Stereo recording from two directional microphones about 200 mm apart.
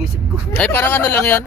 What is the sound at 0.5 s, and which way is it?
Speech, 10° left (ahead or behind).